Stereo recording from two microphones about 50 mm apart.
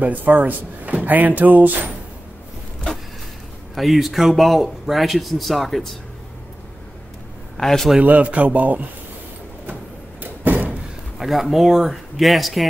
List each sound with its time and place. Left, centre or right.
0.0 s speech: right
3.7 s speech: centre
7.5 s a man's voice: centre
8.0 s speech: right
10.2 s door: right
10.7 s speech: centre